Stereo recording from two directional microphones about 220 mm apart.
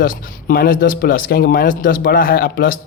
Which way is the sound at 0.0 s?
40° left (ahead or behind).